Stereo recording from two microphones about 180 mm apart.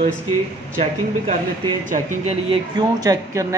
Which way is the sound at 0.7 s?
40° right (ahead or behind).